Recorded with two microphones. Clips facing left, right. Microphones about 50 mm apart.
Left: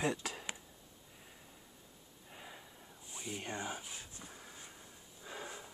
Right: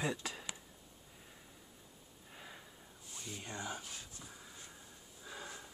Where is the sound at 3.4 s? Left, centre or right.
Left.